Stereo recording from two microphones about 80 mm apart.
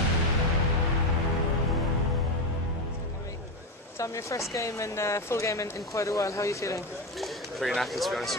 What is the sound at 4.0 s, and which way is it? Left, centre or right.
Speech, left.